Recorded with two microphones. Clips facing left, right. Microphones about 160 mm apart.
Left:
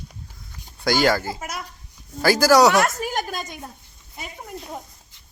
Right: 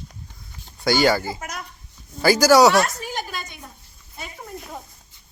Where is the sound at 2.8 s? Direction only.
50° left (ahead or behind).